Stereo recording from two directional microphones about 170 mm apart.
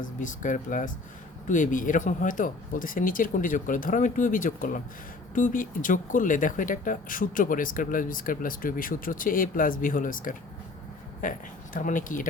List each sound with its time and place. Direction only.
0.0 s speech: 50° left (ahead or behind)